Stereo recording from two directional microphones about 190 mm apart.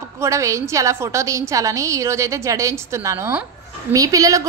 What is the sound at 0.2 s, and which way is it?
A woman's voice, 15° right (ahead or behind).